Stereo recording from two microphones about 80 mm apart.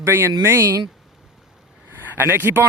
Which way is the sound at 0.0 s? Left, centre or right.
Right.